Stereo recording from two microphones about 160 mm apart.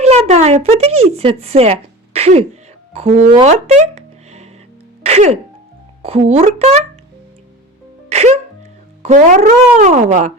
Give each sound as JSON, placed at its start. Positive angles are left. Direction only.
{"t": 0.0, "sound": "speech", "side_deg": -40}
{"t": 2.1, "sound": "sneeze", "side_deg": -40}
{"t": 2.9, "sound": "speech", "side_deg": -40}
{"t": 3.2, "sound": "a sound", "side_deg": -45}
{"t": 5.0, "sound": "speech", "side_deg": -45}
{"t": 8.1, "sound": "music", "side_deg": -45}
{"t": 9.0, "sound": "speech", "side_deg": -50}